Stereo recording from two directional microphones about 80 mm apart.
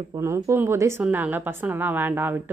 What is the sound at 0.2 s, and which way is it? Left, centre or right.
Speech, right.